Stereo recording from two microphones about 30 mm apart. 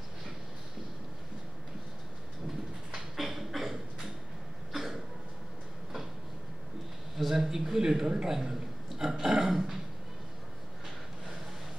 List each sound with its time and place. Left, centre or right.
3.2 s a sound: centre
4.7 s cough: centre
7.2 s a man's voice: centre; by 8.3 s right
8.3 s a man's voice: centre